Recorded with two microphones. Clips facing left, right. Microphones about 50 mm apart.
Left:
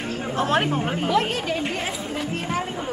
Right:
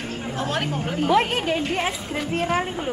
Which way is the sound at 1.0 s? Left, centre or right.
Right.